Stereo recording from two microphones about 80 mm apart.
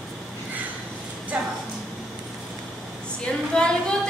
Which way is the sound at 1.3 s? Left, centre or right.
Centre.